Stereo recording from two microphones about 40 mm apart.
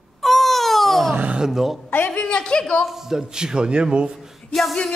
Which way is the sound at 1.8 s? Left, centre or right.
Left.